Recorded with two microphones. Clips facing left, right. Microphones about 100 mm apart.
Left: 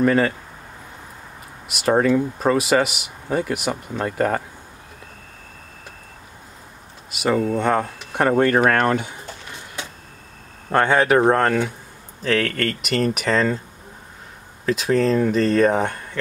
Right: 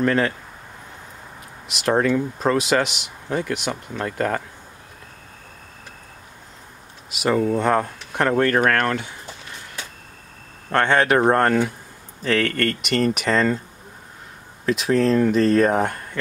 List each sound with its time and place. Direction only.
0.0 s speech: 5° left (ahead or behind)
1.7 s speech: 5° left (ahead or behind)
7.1 s speech: centre (ahead or behind); by 9.1 s 20° left (ahead or behind)
10.7 s speech: 10° left (ahead or behind)
14.7 s speech: centre (ahead or behind)